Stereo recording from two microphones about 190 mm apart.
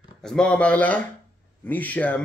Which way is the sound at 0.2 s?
5° left (ahead or behind).